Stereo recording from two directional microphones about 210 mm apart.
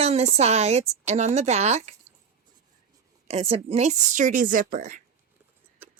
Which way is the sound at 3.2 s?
30° right (ahead or behind).